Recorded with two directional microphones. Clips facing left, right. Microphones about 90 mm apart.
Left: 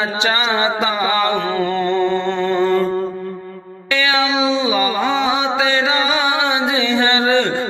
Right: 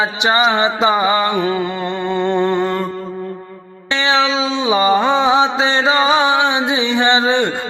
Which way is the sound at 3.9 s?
30° right (ahead or behind).